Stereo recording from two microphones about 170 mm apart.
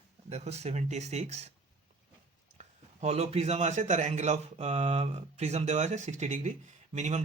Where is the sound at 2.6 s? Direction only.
40° right (ahead or behind).